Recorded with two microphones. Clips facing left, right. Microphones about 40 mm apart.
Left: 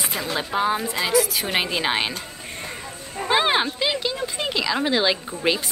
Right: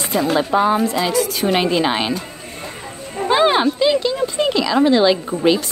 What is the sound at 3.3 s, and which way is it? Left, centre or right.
A woman's voice, centre.